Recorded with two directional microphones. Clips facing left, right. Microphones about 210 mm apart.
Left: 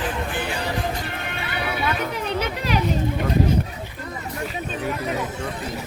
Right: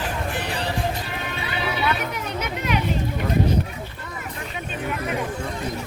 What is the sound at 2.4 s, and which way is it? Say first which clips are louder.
Speech: even; 35° left (ahead or behind).